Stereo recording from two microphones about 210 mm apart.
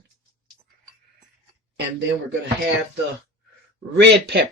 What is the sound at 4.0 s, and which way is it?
Speech, 55° right (ahead or behind).